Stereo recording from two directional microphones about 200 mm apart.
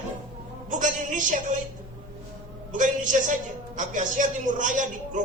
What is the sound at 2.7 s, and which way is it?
A woman's voice, 40° right (ahead or behind).